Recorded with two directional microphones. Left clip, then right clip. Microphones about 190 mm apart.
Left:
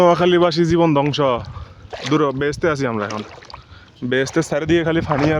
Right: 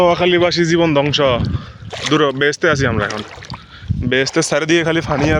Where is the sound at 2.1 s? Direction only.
5° right (ahead or behind).